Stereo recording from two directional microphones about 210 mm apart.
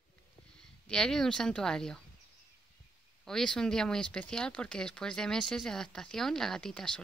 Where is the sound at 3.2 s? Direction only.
5° left (ahead or behind).